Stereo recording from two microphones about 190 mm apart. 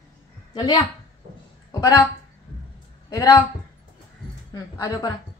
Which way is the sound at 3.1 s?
15° left (ahead or behind).